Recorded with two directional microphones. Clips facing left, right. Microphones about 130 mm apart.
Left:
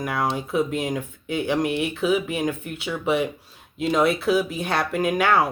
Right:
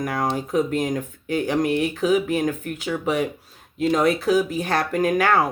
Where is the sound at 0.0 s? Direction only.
40° right (ahead or behind).